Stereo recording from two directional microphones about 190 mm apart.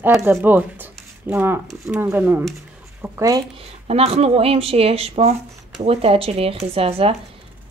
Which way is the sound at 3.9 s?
35° right (ahead or behind).